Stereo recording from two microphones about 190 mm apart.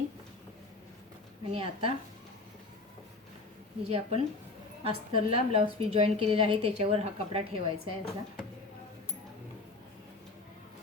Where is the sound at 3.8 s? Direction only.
30° right (ahead or behind).